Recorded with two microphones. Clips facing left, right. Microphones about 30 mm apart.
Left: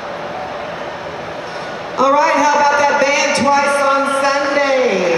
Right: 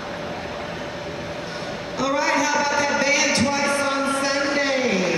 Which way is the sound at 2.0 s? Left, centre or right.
Left.